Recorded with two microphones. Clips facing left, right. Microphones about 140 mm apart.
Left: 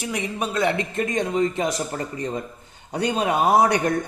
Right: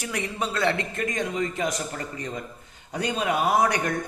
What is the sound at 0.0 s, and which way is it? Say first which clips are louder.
A man's voice: left 3 dB; 20° left (ahead or behind).